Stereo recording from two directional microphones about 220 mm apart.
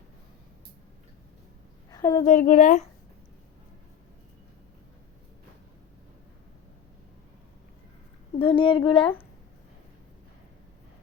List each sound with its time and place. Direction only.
1.9 s a sound: 15° left (ahead or behind)
2.2 s speech: 35° left (ahead or behind)
8.4 s speech: 25° left (ahead or behind)